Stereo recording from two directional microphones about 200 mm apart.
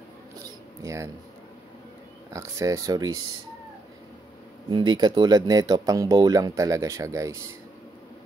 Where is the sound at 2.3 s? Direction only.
15° right (ahead or behind).